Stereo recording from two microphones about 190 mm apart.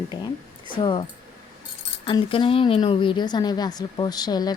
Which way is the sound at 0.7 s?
25° left (ahead or behind).